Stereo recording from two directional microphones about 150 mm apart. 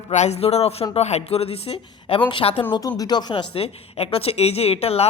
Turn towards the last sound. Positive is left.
turn(degrees=45)  # may be behind; listen again after turning